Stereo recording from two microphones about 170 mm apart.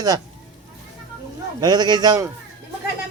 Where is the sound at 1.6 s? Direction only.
25° right (ahead or behind).